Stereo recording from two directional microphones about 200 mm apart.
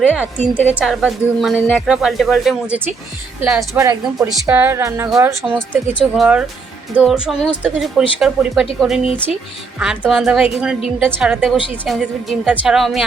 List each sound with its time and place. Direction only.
0.5 s a woman's voice: 10° left (ahead or behind)
0.8 s a woman's voice: centre (ahead or behind)
5.4 s speech: 5° left (ahead or behind)
6.9 s a woman's voice: 5° right (ahead or behind)